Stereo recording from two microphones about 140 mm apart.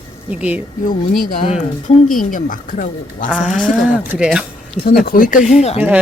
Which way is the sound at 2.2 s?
75° left (ahead or behind).